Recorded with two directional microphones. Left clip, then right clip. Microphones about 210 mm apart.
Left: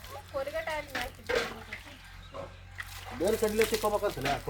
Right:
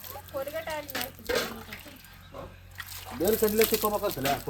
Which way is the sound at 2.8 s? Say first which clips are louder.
Right 2 dB; 50° right (ahead or behind).